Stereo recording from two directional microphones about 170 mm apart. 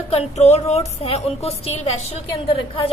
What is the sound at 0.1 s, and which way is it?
A woman's voice, 40° left (ahead or behind).